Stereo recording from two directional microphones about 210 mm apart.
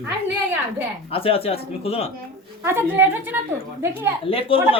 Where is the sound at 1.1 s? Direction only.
25° left (ahead or behind).